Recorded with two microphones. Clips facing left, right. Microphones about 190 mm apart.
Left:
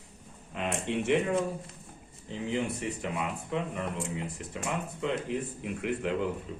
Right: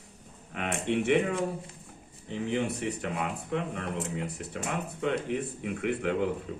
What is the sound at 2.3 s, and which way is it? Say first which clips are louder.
Speech: right 2 dB; 65° right (ahead or behind).